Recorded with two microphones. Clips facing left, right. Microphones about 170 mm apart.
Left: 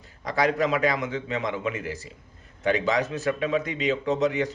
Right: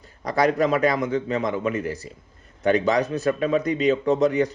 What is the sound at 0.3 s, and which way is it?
A man's voice, 40° right (ahead or behind).